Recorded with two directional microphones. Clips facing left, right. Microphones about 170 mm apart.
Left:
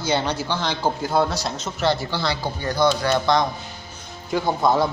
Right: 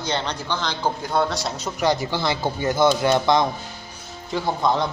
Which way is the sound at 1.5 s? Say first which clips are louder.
Right 1 dB; 15° right (ahead or behind).